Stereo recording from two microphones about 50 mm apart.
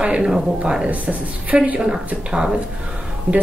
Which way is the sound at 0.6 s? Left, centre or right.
Centre.